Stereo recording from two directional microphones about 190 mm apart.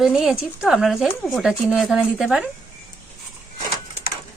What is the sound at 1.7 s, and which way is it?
Speech, centre (ahead or behind).